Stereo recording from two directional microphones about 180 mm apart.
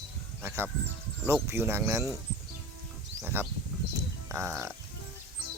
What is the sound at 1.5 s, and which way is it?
Speech, 15° right (ahead or behind).